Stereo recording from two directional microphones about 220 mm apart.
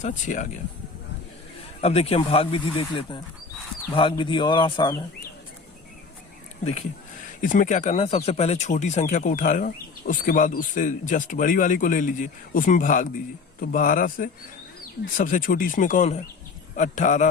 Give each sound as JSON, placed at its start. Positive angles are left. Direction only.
{"t": 0.0, "sound": "speech", "side_deg": 35}
{"t": 1.8, "sound": "speech", "side_deg": 25}
{"t": 7.4, "sound": "speech", "side_deg": 35}